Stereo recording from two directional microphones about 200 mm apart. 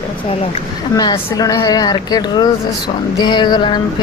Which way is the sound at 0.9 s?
20° left (ahead or behind).